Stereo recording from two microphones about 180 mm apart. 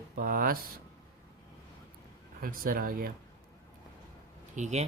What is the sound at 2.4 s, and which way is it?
Speech, 55° right (ahead or behind).